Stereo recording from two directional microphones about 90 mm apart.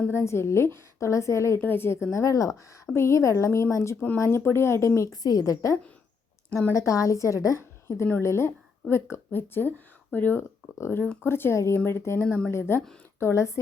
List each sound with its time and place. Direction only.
0.1 s speech: 30° left (ahead or behind)
2.1 s speech: 35° left (ahead or behind)
6.7 s speech: 40° left (ahead or behind)